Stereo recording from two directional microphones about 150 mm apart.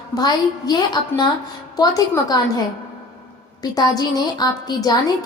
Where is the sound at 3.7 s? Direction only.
25° left (ahead or behind).